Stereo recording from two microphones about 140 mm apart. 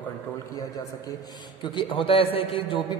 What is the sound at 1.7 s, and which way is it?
A man's voice, 40° left (ahead or behind).